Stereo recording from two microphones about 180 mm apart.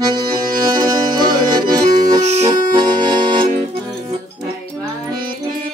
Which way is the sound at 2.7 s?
20° right (ahead or behind).